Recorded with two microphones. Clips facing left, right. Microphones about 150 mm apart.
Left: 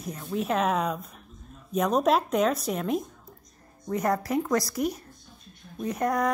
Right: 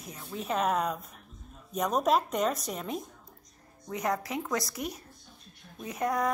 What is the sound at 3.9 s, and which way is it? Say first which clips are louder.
Speech: left 5 dB; 45° left (ahead or behind).